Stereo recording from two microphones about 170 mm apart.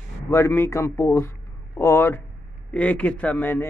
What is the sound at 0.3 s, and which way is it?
Speech, 15° left (ahead or behind).